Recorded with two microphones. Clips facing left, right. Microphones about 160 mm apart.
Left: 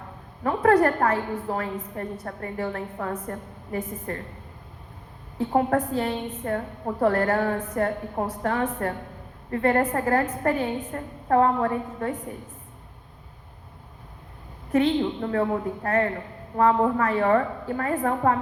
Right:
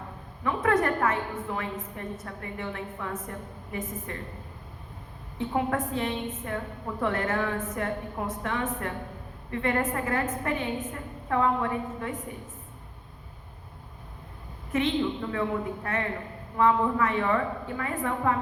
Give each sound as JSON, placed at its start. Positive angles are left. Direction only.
{"t": 0.4, "sound": "a woman's voice", "side_deg": 35}
{"t": 5.5, "sound": "a woman's voice", "side_deg": 35}
{"t": 14.7, "sound": "a woman's voice", "side_deg": 35}